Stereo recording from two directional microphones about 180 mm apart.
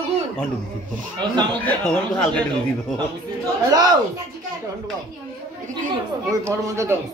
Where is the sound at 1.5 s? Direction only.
5° left (ahead or behind).